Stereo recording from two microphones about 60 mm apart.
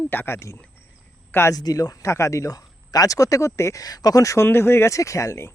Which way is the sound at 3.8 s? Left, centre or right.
Left.